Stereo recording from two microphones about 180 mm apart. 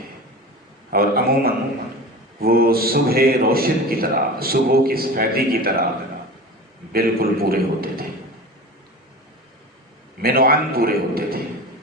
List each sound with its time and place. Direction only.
0.9 s a man's voice: 55° right (ahead or behind)
6.9 s a man's voice: 55° right (ahead or behind)
10.2 s a man's voice: 55° right (ahead or behind)